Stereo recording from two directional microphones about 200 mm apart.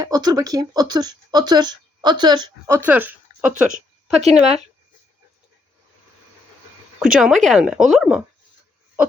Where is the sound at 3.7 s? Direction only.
35° right (ahead or behind).